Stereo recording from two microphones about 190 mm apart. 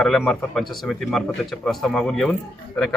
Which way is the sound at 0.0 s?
Centre (ahead or behind).